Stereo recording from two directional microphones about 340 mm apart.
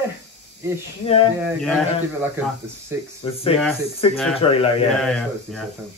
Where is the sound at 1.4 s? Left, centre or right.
Centre.